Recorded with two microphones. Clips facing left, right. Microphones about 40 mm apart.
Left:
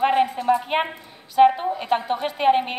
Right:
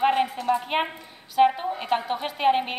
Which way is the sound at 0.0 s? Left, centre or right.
Centre.